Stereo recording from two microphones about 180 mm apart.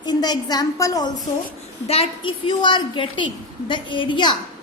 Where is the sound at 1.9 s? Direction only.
30° left (ahead or behind).